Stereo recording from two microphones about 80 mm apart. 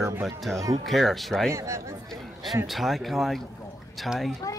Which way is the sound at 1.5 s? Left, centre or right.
Right.